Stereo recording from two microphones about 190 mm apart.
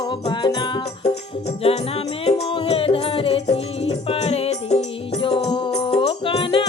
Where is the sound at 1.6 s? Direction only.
35° left (ahead or behind).